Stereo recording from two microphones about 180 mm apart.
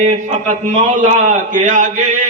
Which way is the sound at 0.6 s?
45° right (ahead or behind).